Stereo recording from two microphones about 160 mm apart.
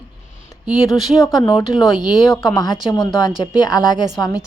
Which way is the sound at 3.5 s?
25° left (ahead or behind).